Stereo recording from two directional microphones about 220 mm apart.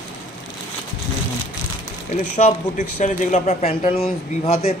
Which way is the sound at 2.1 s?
30° left (ahead or behind).